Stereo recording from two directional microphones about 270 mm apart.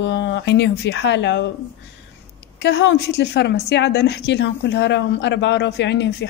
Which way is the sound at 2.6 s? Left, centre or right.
Left.